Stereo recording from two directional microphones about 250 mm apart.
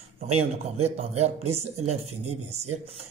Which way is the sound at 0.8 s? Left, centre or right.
Right.